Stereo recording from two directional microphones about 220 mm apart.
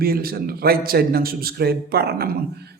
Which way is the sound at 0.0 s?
45° right (ahead or behind).